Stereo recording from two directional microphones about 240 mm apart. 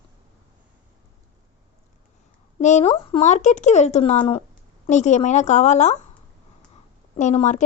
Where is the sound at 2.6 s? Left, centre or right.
Left.